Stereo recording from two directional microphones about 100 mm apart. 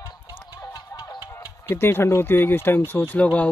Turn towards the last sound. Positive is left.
turn(degrees=15)  # may be behind; listen again after turning